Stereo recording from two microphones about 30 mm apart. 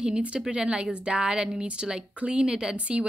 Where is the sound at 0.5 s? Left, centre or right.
Right.